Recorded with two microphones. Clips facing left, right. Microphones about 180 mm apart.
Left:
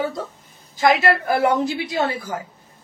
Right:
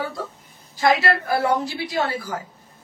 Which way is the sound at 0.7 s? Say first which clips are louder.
Left 2 dB; 20° left (ahead or behind).